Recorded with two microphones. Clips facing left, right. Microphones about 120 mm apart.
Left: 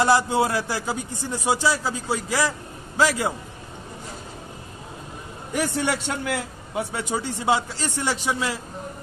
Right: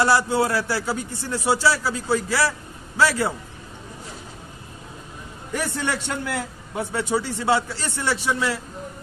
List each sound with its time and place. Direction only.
0.0 s a man's voice: 20° left (ahead or behind)
5.5 s a man's voice: 15° left (ahead or behind)